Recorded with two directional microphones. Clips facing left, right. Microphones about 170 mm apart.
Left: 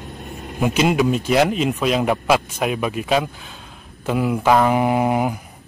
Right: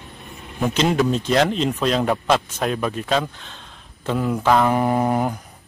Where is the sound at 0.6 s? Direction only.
10° left (ahead or behind).